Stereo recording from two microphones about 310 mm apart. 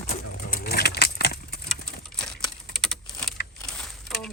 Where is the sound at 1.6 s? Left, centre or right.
Centre.